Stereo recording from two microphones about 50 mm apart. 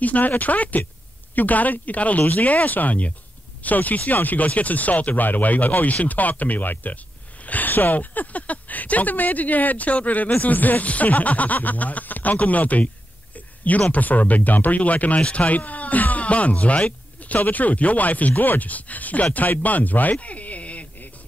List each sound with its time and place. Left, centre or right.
0.0 s speech: left
13.9 s speech: left